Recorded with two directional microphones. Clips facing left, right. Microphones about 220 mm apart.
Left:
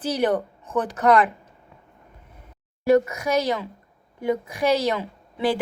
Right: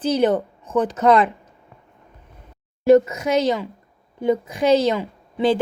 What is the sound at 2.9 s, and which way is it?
Speech, 20° right (ahead or behind).